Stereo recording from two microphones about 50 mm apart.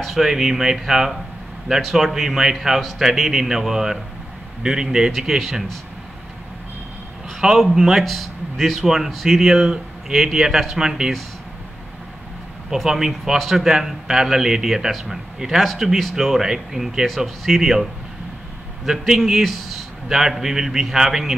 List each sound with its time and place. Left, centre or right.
0.0 s a man's voice: centre
7.2 s a man's voice: centre
12.7 s a man's voice: centre
18.9 s a man's voice: centre